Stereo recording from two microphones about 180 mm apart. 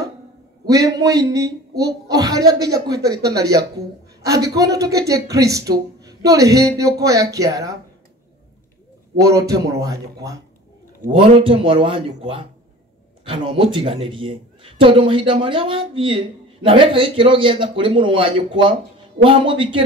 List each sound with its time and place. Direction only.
0.7 s speech: 20° right (ahead or behind)
9.1 s speech: 20° right (ahead or behind)